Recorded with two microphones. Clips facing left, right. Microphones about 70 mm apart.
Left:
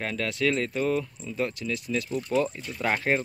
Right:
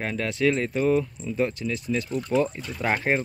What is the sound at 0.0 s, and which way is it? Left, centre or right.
Speech, centre.